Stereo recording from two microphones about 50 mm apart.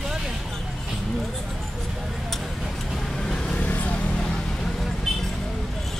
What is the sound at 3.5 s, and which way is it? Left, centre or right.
Vehicle, left.